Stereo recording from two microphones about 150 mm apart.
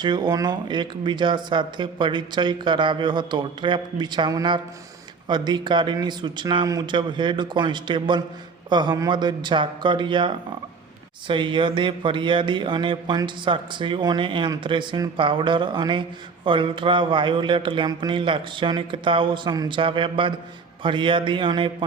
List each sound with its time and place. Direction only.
0.0 s speech: 30° right (ahead or behind)